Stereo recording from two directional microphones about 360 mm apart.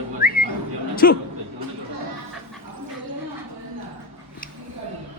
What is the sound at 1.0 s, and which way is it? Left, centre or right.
Speech, left.